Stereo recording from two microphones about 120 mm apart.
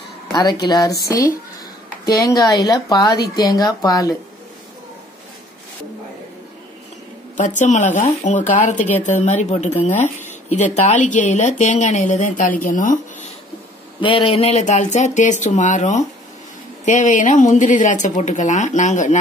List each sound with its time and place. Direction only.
0.3 s speech: 35° left (ahead or behind)
7.3 s speech: 90° left
14.0 s speech: 45° left (ahead or behind); by 19.1 s 85° left